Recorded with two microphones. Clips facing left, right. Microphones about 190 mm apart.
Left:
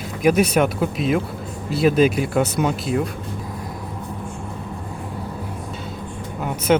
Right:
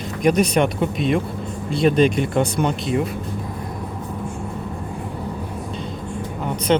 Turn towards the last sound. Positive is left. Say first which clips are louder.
# left 1 dB
turn(degrees=5)  # may be behind; listen again after turning